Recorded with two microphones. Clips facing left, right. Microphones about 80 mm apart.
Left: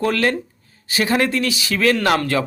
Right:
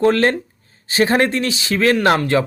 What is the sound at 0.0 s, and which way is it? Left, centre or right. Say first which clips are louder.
Speech: right 4 dB; right.